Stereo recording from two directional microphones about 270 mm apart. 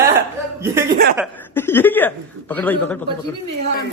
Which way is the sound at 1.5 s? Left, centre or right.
Centre.